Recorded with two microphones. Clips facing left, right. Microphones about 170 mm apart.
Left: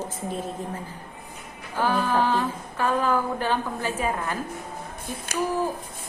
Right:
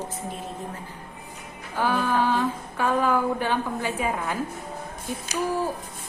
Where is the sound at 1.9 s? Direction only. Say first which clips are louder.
Even; 10° left (ahead or behind).